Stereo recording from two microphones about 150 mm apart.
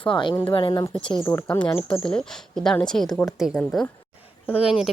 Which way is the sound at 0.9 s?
5° left (ahead or behind).